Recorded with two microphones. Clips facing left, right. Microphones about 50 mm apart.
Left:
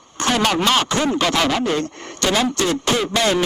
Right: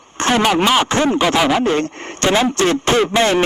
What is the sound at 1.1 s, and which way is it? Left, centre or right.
Speech, centre.